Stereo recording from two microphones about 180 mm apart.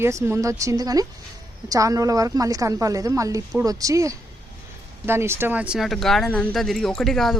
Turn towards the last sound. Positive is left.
turn(degrees=0)  # may be behind; listen again after turning